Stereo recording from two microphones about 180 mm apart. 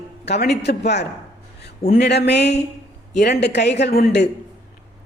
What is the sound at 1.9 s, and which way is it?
Speech, 70° left (ahead or behind).